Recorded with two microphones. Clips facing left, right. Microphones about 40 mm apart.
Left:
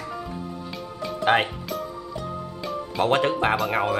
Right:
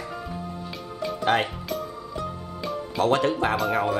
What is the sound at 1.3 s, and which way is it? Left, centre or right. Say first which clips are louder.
Speech: left 2 dB; left.